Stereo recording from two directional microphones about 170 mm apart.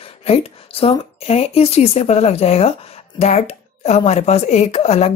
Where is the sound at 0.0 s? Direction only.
35° left (ahead or behind).